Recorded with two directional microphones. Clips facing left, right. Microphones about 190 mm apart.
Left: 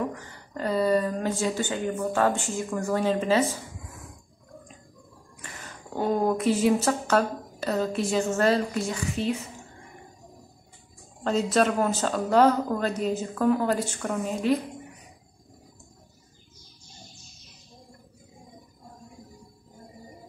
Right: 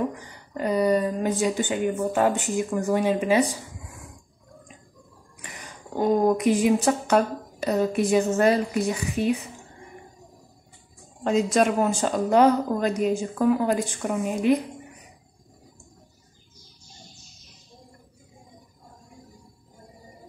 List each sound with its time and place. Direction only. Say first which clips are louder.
0.1 s a woman's voice: right 1 dB; 15° right (ahead or behind)
5.4 s a woman's voice: right 1 dB; 15° right (ahead or behind)
11.2 s a woman's voice: right 2 dB; 10° right (ahead or behind)